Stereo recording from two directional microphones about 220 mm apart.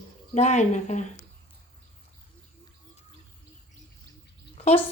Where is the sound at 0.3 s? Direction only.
30° left (ahead or behind).